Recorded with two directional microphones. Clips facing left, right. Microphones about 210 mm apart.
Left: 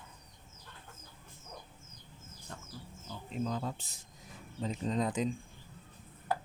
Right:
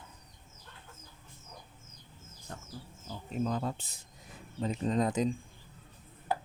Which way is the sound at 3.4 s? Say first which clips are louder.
Right 3 dB; 60° right (ahead or behind).